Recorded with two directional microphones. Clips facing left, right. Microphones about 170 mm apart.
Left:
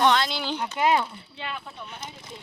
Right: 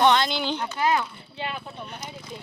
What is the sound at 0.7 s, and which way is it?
Speech, 20° left (ahead or behind).